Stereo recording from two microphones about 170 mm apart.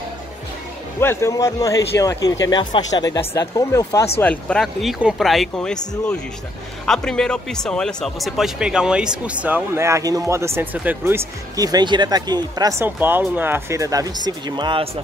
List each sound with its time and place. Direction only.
1.0 s speech: 15° left (ahead or behind)
4.2 s speech: 10° left (ahead or behind)
6.9 s speech: 5° left (ahead or behind); by 14.9 s 30° right (ahead or behind)